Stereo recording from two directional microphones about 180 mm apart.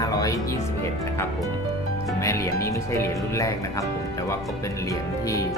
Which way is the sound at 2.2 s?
15° left (ahead or behind).